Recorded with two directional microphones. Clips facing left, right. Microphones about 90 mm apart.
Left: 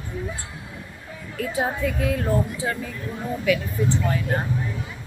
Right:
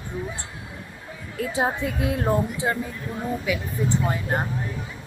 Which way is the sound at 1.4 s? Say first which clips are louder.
Even; 25° right (ahead or behind).